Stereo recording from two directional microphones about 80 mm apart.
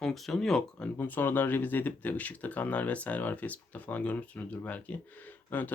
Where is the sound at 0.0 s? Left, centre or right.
Centre.